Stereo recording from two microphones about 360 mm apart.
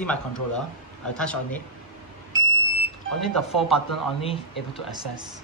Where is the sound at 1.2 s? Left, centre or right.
Centre.